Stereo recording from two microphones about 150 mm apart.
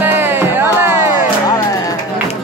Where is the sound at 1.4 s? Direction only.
25° left (ahead or behind).